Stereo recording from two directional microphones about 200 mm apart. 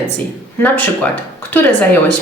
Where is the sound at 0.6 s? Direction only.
10° left (ahead or behind).